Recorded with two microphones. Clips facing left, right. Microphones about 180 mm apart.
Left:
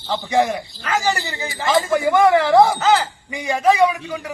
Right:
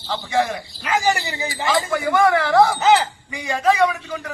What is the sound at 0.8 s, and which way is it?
Speech, 15° right (ahead or behind).